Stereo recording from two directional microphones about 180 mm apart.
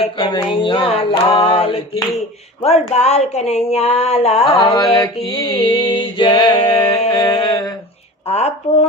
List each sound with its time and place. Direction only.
0.0 s a sound: 30° left (ahead or behind)
2.6 s speech: 35° left (ahead or behind)
4.6 s mantra: 20° left (ahead or behind)
8.3 s speech: 35° left (ahead or behind)